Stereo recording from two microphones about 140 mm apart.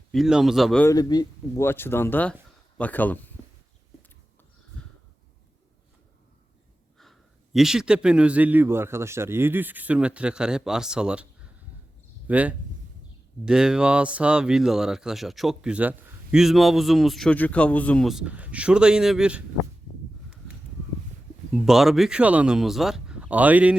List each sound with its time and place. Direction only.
0.1 s speech: 5° right (ahead or behind)
0.9 s speech: 30° left (ahead or behind)
1.6 s speech: 15° left (ahead or behind)
7.0 s a man's voice: centre (ahead or behind)
12.3 s a man's voice: 10° right (ahead or behind)
21.5 s speech: centre (ahead or behind)